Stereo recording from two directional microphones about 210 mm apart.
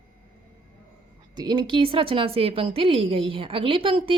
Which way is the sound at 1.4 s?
20° right (ahead or behind).